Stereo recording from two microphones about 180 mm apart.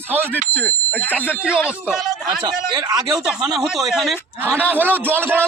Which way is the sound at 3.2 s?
5° right (ahead or behind).